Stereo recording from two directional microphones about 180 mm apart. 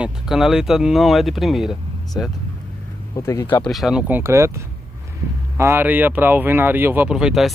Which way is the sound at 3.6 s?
Centre (ahead or behind).